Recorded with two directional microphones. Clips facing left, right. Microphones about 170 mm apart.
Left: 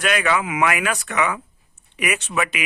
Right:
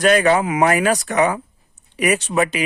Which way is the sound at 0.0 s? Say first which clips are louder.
Right 7 dB; 35° right (ahead or behind).